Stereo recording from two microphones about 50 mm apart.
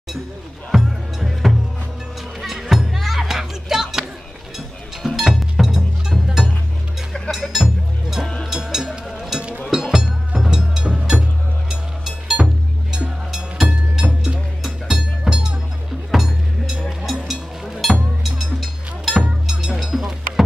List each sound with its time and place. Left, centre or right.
0.7 s music: centre